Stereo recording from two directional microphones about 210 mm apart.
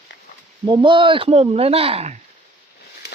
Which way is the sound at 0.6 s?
20° right (ahead or behind).